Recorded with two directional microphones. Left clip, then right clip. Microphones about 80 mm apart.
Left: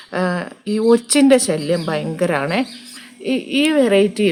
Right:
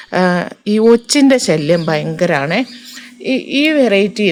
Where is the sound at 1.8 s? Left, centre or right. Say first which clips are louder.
Right 5 dB; right.